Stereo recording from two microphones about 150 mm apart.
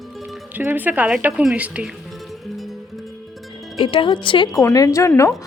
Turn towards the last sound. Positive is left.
turn(degrees=20)  # may be behind; listen again after turning